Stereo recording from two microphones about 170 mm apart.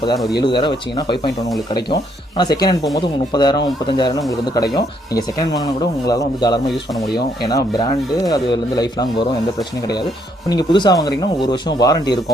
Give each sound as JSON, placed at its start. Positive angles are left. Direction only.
{"t": 0.3, "sound": "speech", "side_deg": 30}
{"t": 2.4, "sound": "speech", "side_deg": 25}